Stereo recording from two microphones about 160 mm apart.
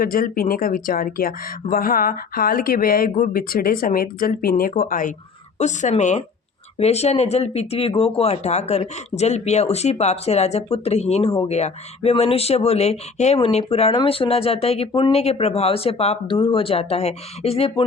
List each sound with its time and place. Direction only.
0.0 s speech: 65° left (ahead or behind)
5.5 s speech: 45° left (ahead or behind)